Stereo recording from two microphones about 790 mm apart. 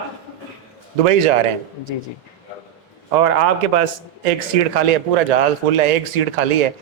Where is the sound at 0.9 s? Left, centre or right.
Right.